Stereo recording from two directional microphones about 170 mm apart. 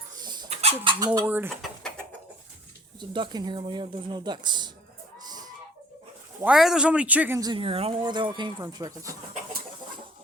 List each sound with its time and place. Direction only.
0.2 s dog: 25° right (ahead or behind)
0.5 s chicken: 35° right (ahead or behind)
0.9 s speech: 20° right (ahead or behind)
1.6 s a sound: 5° left (ahead or behind)
3.0 s speech: 25° right (ahead or behind)
5.2 s chicken: 25° right (ahead or behind)
6.4 s a man's voice: 5° right (ahead or behind)
7.3 s speech: 25° right (ahead or behind)